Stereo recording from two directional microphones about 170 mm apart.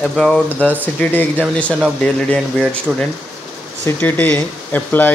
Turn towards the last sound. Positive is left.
turn(degrees=10)  # may be behind; listen again after turning